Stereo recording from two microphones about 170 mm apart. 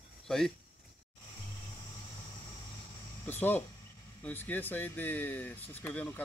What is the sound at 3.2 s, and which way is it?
Speech, 10° left (ahead or behind).